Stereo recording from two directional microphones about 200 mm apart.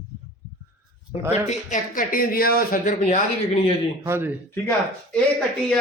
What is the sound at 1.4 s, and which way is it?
A man's voice, 40° left (ahead or behind).